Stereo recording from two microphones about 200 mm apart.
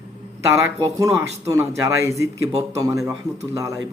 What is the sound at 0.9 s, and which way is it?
A man's voice, 15° right (ahead or behind).